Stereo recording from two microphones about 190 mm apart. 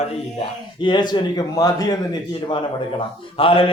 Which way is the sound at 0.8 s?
25° left (ahead or behind).